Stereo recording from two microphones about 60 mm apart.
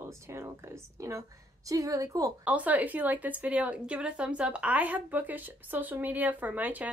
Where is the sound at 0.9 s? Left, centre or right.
Right.